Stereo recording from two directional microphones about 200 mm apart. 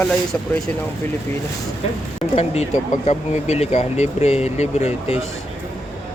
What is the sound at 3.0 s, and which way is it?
Speech, 35° left (ahead or behind).